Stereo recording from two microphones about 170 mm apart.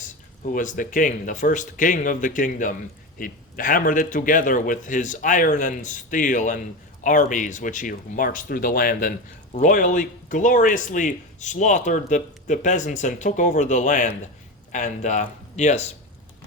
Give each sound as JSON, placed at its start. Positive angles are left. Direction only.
{"t": 0.5, "sound": "a man's voice", "side_deg": 50}